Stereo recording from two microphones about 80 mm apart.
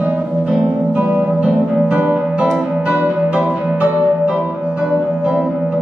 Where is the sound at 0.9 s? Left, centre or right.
Centre.